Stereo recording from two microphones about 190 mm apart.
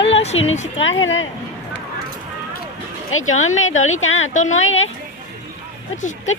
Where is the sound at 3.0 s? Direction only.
90° left.